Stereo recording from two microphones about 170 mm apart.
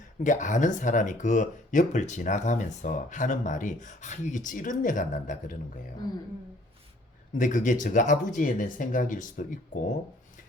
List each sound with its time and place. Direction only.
0.2 s speech: 45° left (ahead or behind)
6.0 s speech: 20° left (ahead or behind)
7.3 s speech: 50° left (ahead or behind)